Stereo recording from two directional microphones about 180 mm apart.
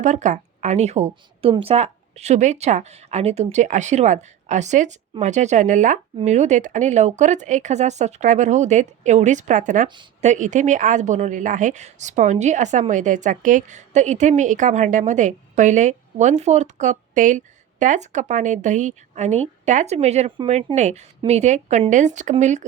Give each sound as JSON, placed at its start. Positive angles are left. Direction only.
{"t": 0.0, "sound": "a woman's voice", "side_deg": -45}